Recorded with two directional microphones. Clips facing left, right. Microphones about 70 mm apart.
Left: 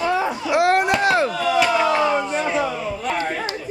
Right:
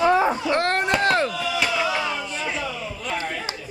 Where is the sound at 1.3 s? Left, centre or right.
Left.